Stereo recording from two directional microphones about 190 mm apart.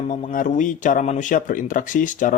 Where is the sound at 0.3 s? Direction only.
45° left (ahead or behind).